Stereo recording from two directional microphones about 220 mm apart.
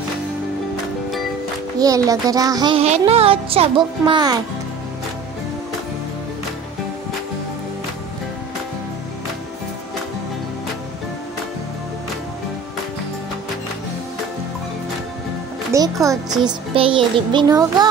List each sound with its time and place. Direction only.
1.8 s a child's voice: 15° right (ahead or behind)
15.7 s a child's voice: 15° right (ahead or behind)